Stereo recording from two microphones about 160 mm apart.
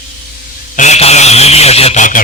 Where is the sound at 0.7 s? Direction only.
45° left (ahead or behind).